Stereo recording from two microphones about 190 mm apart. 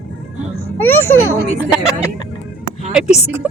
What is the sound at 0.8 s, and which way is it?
Speech, 10° left (ahead or behind).